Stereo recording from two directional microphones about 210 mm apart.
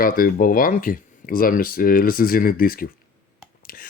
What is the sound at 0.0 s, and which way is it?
Speech, 40° left (ahead or behind).